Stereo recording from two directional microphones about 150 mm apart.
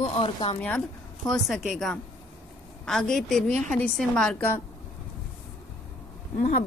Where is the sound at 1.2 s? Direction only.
Centre (ahead or behind).